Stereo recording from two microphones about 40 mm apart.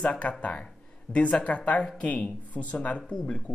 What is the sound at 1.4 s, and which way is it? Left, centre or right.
Speech, left.